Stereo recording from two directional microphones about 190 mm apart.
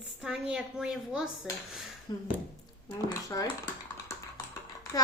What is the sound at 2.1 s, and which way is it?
Speech, 25° left (ahead or behind).